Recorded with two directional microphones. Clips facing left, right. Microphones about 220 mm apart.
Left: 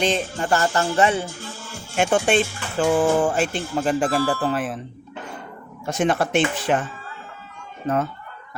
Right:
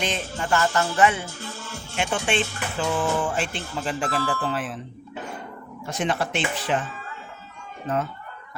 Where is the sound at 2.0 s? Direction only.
50° left (ahead or behind).